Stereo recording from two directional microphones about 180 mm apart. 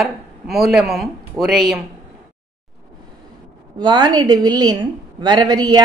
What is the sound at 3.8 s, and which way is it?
A woman's voice, 25° right (ahead or behind).